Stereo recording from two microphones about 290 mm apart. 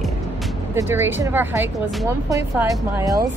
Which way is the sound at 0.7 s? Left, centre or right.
Centre.